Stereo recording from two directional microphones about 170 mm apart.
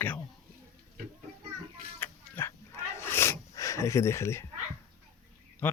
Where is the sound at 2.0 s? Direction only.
15° left (ahead or behind).